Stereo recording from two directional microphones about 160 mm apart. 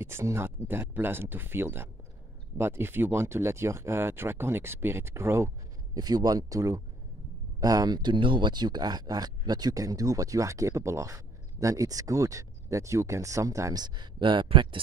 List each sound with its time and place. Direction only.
0.0 s speech: 15° right (ahead or behind); by 14.8 s 30° right (ahead or behind)